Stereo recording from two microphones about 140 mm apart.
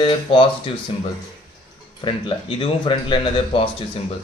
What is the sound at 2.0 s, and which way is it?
Speech, 35° left (ahead or behind).